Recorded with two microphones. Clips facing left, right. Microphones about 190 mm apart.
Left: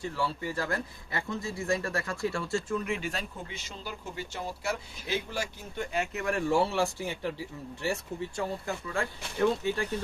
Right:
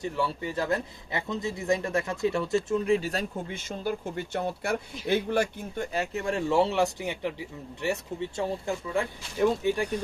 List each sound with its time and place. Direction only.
0.0 s speech: 20° right (ahead or behind); by 5.8 s 55° right (ahead or behind)
5.9 s speech: 35° right (ahead or behind); by 10.0 s 15° right (ahead or behind)